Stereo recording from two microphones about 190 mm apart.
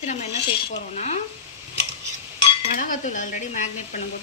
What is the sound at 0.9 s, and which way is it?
Speech, 35° left (ahead or behind).